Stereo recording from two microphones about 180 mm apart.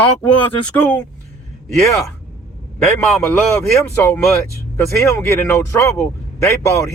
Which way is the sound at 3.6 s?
15° left (ahead or behind).